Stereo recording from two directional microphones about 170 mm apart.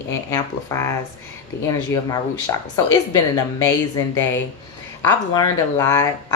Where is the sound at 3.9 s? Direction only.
15° left (ahead or behind).